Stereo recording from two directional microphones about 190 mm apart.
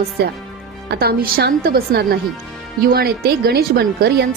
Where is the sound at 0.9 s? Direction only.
55° right (ahead or behind).